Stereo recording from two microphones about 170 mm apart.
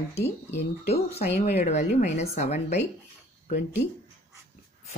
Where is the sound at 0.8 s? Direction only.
35° left (ahead or behind).